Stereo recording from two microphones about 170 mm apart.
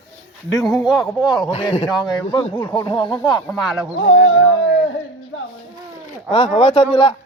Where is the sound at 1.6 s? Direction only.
25° left (ahead or behind).